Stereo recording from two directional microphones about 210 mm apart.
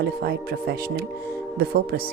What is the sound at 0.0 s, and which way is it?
Speech, 50° right (ahead or behind).